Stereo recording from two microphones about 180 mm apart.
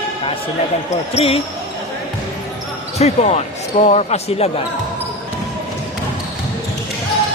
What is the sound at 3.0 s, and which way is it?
Speech, 35° left (ahead or behind).